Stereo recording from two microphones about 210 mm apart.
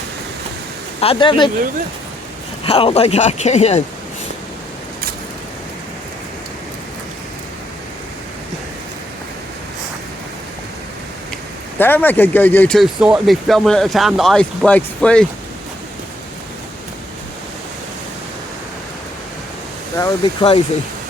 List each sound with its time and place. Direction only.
1.0 s speech: 25° left (ahead or behind)
2.6 s speech: 25° left (ahead or behind)
11.8 s speech: 10° left (ahead or behind)
20.0 s speech: 20° left (ahead or behind)